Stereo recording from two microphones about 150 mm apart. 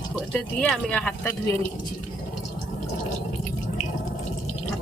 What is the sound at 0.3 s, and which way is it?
Speech, 5° left (ahead or behind).